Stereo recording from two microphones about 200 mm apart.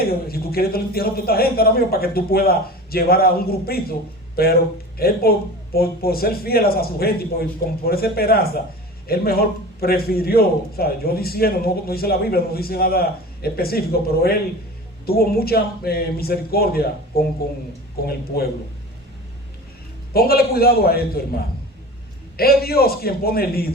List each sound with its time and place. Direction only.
0.0 s a man's voice: 50° left (ahead or behind)
4.9 s a man's voice: 50° left (ahead or behind)
20.1 s a man's voice: 50° left (ahead or behind)